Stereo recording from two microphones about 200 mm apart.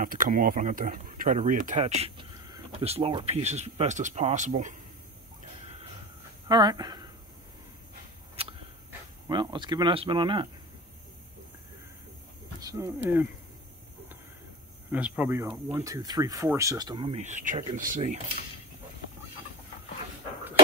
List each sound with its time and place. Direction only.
0.0 s speech: 40° right (ahead or behind)
6.5 s speech: 20° right (ahead or behind)
8.4 s a sound: 30° right (ahead or behind)
9.3 s speech: 25° right (ahead or behind)
12.5 s speech: 15° right (ahead or behind)
14.9 s speech: 5° right (ahead or behind); by 18.1 s 40° right (ahead or behind)